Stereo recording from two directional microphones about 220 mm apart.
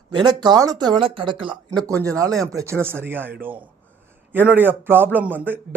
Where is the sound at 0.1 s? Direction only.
20° right (ahead or behind).